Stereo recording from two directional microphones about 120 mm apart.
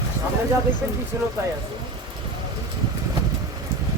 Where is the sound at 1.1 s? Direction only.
20° right (ahead or behind).